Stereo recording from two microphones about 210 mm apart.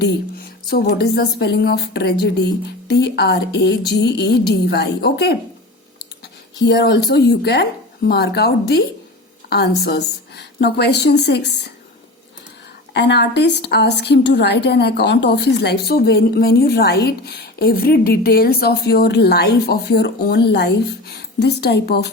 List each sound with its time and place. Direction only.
0.7 s a woman's voice: 50° left (ahead or behind)
6.6 s a woman's voice: 55° left (ahead or behind)
12.9 s a woman's voice: 55° left (ahead or behind)